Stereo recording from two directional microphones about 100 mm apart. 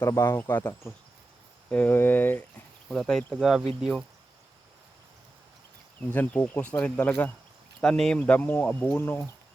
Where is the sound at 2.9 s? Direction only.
5° left (ahead or behind).